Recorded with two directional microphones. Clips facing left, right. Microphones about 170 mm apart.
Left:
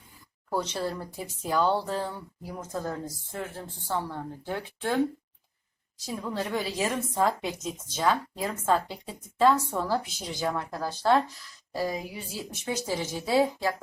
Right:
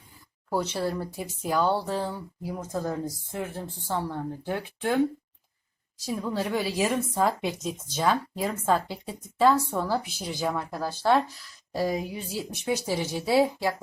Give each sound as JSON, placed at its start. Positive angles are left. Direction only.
{"t": 0.5, "sound": "a woman's voice", "side_deg": -10}
{"t": 6.1, "sound": "a woman's voice", "side_deg": -10}